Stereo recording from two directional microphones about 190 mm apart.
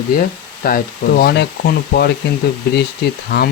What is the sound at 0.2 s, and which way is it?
Speech, 50° left (ahead or behind).